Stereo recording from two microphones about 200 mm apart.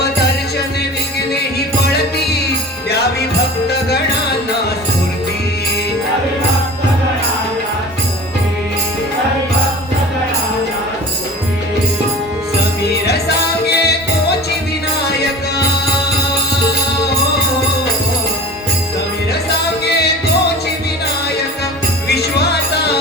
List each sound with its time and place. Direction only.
1.3 s music: 55° left (ahead or behind)
13.1 s music: 55° left (ahead or behind)
22.1 s music: 55° left (ahead or behind)